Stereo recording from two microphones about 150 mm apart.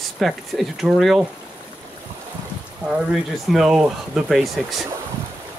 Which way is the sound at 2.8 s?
5° right (ahead or behind).